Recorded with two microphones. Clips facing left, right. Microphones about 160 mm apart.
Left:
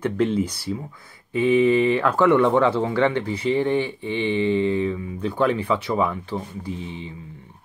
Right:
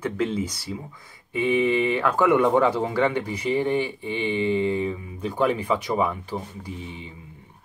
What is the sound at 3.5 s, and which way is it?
Speech, 10° right (ahead or behind).